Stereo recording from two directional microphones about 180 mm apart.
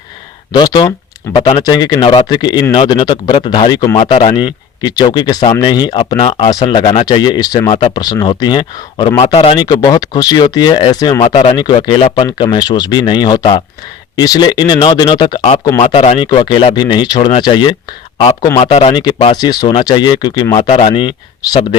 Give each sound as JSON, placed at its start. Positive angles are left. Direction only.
{"t": 0.5, "sound": "speech", "side_deg": 25}
{"t": 18.6, "sound": "speech", "side_deg": 35}